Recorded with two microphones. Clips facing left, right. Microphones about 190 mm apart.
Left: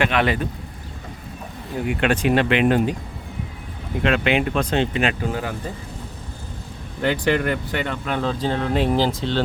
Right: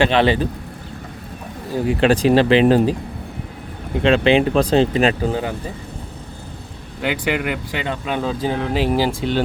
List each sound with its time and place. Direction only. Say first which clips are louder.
0.0 s speech: right 5 dB; 30° right (ahead or behind)
1.7 s speech: right 5 dB; 30° right (ahead or behind)
4.0 s speech: right 5 dB; 30° right (ahead or behind)
7.0 s speech: left 1 dB; 10° right (ahead or behind)